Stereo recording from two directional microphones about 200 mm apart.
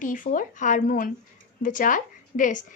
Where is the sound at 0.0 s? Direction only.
40° left (ahead or behind).